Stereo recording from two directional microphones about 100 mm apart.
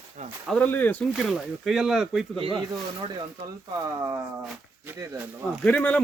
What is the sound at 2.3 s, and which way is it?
Speech, 65° right (ahead or behind).